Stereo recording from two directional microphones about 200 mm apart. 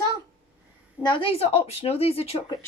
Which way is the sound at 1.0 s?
25° left (ahead or behind).